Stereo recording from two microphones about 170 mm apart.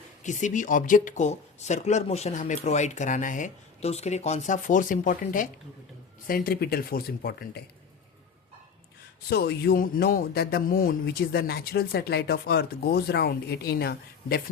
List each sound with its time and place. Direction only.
0.2 s speech: 45° left (ahead or behind)
6.2 s a man's voice: 60° left (ahead or behind)
9.3 s a man's voice: 70° left (ahead or behind)